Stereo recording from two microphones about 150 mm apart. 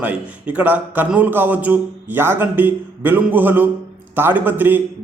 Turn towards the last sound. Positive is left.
turn(degrees=-10)  # may be behind; listen again after turning